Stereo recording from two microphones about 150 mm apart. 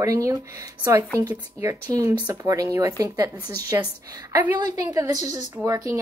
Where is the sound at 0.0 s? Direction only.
20° right (ahead or behind).